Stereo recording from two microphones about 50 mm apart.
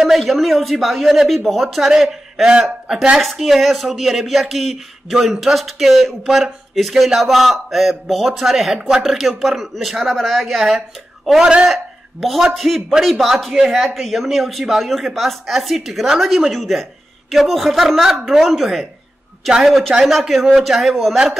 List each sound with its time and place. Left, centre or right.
0.0 s a man's voice: centre
3.2 s a man's voice: centre
11.4 s a man's voice: centre
11.7 s a woman's voice: centre